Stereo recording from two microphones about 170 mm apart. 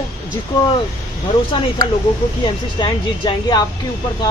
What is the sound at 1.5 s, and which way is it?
Speech, 25° left (ahead or behind).